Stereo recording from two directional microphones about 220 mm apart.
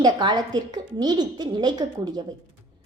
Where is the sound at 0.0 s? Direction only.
20° right (ahead or behind).